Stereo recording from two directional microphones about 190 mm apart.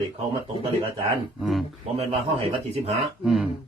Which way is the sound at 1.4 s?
Centre (ahead or behind).